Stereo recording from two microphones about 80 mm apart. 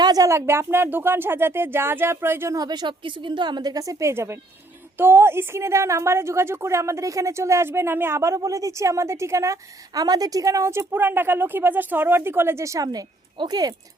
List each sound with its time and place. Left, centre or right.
0.0 s a sound: right
0.3 s speech: right
2.5 s a woman's voice: right